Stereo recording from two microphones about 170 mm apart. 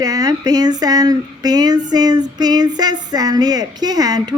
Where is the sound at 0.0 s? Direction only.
20° right (ahead or behind).